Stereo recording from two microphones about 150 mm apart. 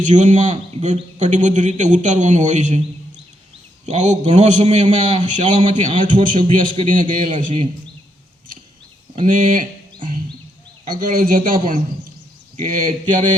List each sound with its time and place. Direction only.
0.0 s a man's voice: 55° right (ahead or behind)
3.8 s a man's voice: 55° right (ahead or behind)
5.9 s a man's voice: 35° right (ahead or behind)
6.2 s a man's voice: 65° right (ahead or behind)
9.2 s a man's voice: 65° right (ahead or behind)
10.8 s a man's voice: 65° right (ahead or behind)